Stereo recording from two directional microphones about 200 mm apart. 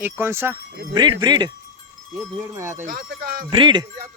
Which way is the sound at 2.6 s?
15° right (ahead or behind).